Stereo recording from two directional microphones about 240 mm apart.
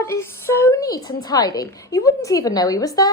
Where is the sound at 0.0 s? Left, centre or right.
Centre.